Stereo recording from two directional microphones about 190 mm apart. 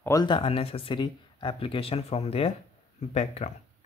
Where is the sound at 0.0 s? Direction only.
20° left (ahead or behind).